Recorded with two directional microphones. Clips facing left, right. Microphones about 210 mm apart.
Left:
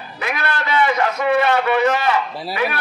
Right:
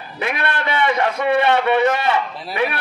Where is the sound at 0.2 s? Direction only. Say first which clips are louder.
Right 1 dB; 25° right (ahead or behind).